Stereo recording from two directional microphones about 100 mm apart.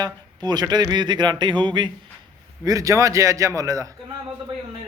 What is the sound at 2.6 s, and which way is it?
A man's voice, 35° right (ahead or behind).